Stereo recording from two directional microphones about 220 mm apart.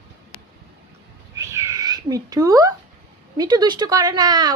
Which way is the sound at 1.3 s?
15° right (ahead or behind).